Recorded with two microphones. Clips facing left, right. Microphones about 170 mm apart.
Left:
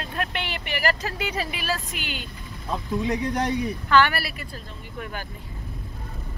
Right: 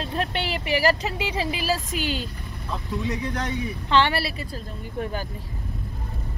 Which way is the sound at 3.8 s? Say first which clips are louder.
Even; 25° right (ahead or behind).